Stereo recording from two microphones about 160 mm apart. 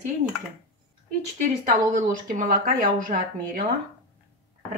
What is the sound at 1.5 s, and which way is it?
A woman's voice, 55° right (ahead or behind).